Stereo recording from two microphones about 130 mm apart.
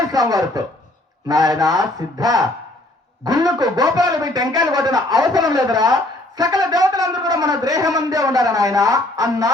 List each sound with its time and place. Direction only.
0.1 s speech: 30° right (ahead or behind)